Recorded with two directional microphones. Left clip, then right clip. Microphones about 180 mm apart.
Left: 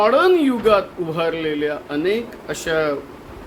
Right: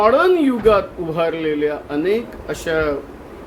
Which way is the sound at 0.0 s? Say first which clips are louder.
Right 1 dB; 10° left (ahead or behind).